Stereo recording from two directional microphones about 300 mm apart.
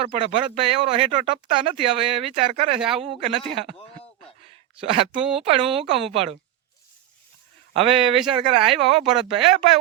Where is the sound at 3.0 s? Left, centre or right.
Right.